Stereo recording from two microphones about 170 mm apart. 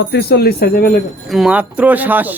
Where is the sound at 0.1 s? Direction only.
70° left (ahead or behind).